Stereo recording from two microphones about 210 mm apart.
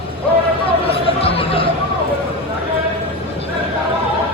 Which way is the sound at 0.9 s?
25° left (ahead or behind).